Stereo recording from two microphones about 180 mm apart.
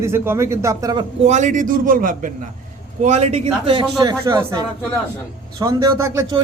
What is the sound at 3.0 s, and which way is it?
Speech, 40° right (ahead or behind).